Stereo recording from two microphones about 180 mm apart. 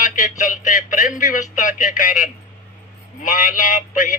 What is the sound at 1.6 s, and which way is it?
A man's voice, 45° left (ahead or behind).